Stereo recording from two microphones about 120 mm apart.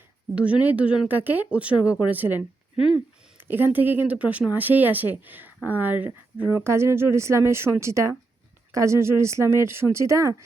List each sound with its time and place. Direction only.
0.3 s speech: 10° right (ahead or behind)
3.4 s speech: 15° right (ahead or behind)